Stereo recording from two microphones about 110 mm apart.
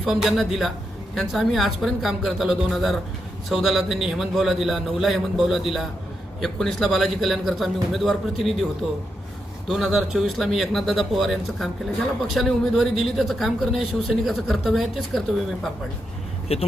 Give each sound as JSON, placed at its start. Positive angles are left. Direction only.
{"t": 0.0, "sound": "speech", "side_deg": -5}
{"t": 16.5, "sound": "speech", "side_deg": 65}